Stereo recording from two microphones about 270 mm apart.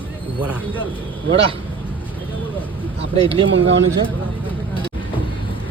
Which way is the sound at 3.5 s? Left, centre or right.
Right.